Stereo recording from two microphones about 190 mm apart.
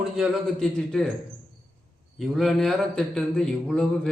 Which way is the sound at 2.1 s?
Centre (ahead or behind).